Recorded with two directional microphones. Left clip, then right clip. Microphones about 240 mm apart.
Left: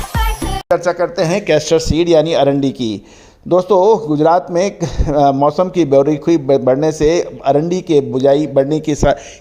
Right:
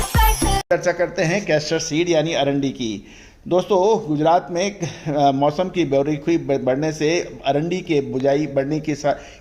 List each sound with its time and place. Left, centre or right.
0.1 s music: centre
0.7 s speech: centre
1.3 s a man's voice: left
2.6 s a man's voice: left
3.5 s a man's voice: left